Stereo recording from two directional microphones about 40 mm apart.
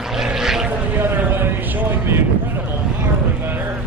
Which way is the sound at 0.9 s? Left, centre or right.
Right.